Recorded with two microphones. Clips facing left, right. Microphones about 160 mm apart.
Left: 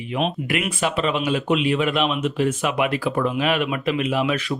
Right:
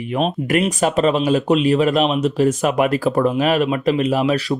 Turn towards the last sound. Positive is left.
turn(degrees=-35)  # may be behind; listen again after turning